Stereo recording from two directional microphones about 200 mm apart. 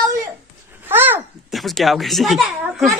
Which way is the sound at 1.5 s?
Centre (ahead or behind).